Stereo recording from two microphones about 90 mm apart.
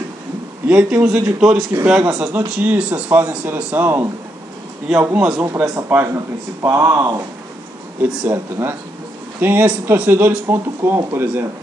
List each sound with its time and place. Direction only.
0.7 s speech: 15° right (ahead or behind)
5.1 s speech: 10° right (ahead or behind)
5.4 s a man's voice: 30° right (ahead or behind)
8.3 s speech: 25° right (ahead or behind)